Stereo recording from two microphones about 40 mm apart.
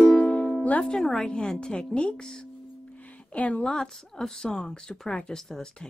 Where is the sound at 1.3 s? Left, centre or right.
Left.